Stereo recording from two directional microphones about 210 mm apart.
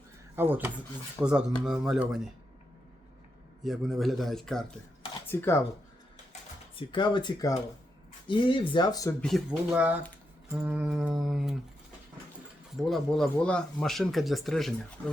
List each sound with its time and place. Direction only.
0.3 s speech: 10° right (ahead or behind)
3.6 s speech: centre (ahead or behind)
6.7 s speech: 20° left (ahead or behind)
9.2 s speech: centre (ahead or behind)
12.7 s speech: centre (ahead or behind)